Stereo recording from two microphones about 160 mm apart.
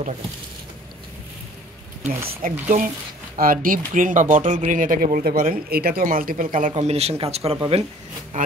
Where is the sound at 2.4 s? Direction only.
60° right (ahead or behind).